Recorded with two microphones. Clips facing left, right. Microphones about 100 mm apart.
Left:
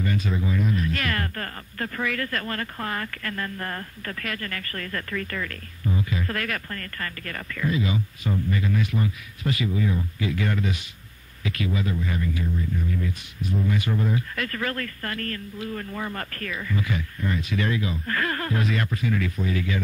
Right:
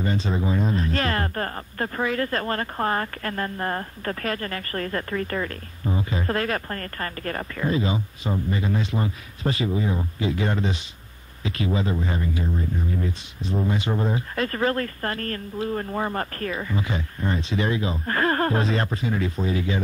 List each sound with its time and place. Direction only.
0.0 s speech: 30° right (ahead or behind)